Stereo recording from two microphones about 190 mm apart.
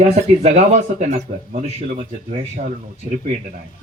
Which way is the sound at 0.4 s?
35° right (ahead or behind).